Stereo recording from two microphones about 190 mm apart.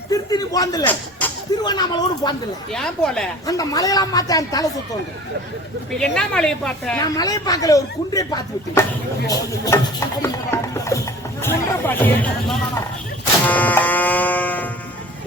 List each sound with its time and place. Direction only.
0.1 s a sound: 20° left (ahead or behind)
1.6 s speech: 20° left (ahead or behind)
2.7 s a woman's voice: 5° left (ahead or behind)
3.4 s speech: 20° left (ahead or behind)
6.0 s a woman's voice: 5° left (ahead or behind)
7.0 s speech: 20° left (ahead or behind)
13.4 s music: 10° left (ahead or behind)